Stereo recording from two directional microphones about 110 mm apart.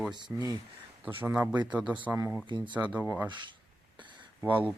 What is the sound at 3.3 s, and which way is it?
Speech, 45° right (ahead or behind).